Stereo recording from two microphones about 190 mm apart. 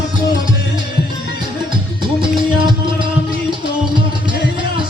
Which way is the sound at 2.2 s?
25° right (ahead or behind).